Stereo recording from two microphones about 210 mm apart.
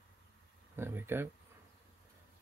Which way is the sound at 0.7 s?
10° right (ahead or behind).